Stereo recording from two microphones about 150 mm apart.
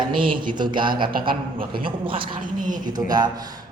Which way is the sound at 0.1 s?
35° right (ahead or behind).